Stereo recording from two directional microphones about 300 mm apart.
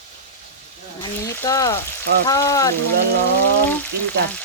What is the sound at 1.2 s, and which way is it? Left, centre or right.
Speech, centre.